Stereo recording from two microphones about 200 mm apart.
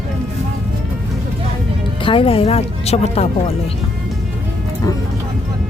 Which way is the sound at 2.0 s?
25° left (ahead or behind).